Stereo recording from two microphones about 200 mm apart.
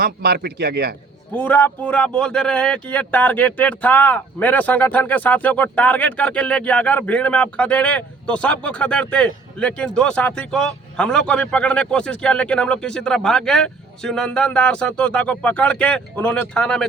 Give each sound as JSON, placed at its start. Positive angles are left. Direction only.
{"t": 0.0, "sound": "speech", "side_deg": -50}
{"t": 1.3, "sound": "speech", "side_deg": 10}